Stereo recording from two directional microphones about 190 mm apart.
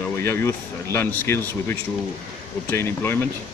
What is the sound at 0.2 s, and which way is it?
Speech, 15° left (ahead or behind).